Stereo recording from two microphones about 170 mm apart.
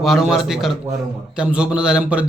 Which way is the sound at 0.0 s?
Centre (ahead or behind).